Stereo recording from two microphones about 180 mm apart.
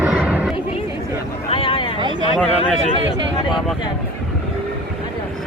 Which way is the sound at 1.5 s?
30° left (ahead or behind).